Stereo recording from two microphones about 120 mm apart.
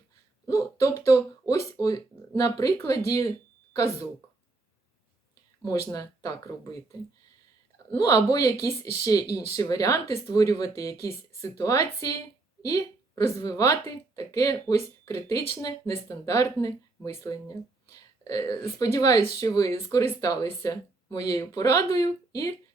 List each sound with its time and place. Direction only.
0.4 s a sound: 25° left (ahead or behind)
2.4 s speech: 30° left (ahead or behind)
5.6 s speech: 30° left (ahead or behind)
7.9 s speech: 30° left (ahead or behind)